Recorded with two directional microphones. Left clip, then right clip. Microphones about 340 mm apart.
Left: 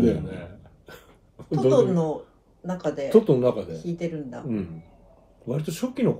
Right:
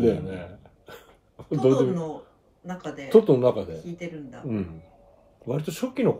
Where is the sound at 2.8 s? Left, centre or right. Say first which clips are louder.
Left 9 dB; centre.